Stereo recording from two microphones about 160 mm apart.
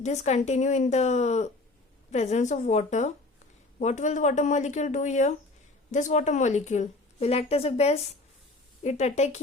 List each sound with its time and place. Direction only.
0.0 s a woman's voice: 45° left (ahead or behind)